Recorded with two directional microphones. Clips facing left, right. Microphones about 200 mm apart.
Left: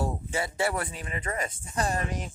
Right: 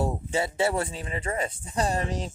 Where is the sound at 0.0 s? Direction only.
25° right (ahead or behind).